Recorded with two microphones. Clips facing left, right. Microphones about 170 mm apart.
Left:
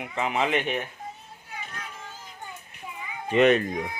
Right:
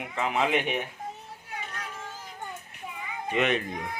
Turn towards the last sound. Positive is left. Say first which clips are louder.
# left 7 dB
turn(degrees=40)  # may be behind; listen again after turning